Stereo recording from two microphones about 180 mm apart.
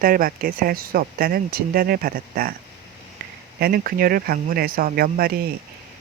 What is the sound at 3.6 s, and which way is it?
Speech, 60° right (ahead or behind).